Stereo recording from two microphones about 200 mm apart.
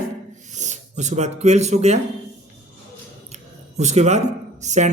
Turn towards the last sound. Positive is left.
turn(degrees=-35)  # may be behind; listen again after turning